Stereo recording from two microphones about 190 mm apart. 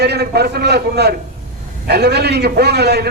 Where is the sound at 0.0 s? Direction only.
60° right (ahead or behind).